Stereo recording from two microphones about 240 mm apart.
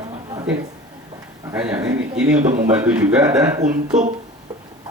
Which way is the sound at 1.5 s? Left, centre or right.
Centre.